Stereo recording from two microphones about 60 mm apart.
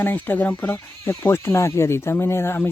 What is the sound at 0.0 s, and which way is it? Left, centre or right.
Speech, left.